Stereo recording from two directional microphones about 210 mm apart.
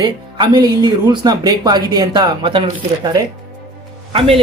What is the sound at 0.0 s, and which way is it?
A woman's voice, 20° right (ahead or behind).